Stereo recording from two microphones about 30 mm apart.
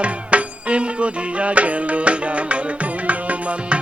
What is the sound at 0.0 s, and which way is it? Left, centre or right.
Music, right.